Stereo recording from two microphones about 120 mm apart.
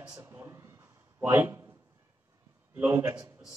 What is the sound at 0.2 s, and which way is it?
A man's voice, 20° right (ahead or behind).